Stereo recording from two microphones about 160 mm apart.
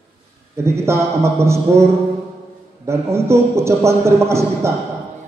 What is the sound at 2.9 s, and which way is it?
A man's voice, 15° right (ahead or behind).